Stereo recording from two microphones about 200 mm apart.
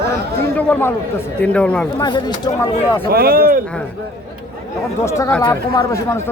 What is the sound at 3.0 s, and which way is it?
Speech, 50° right (ahead or behind).